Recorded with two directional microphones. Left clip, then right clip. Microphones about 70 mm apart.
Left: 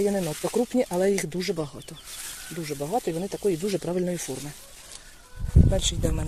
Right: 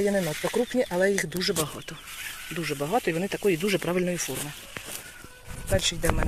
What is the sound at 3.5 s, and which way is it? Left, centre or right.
Speech, centre.